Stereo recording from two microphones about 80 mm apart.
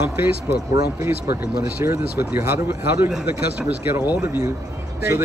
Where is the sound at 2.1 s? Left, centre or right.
Right.